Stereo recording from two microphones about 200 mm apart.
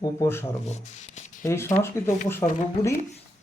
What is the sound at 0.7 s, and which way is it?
Speech, 35° left (ahead or behind).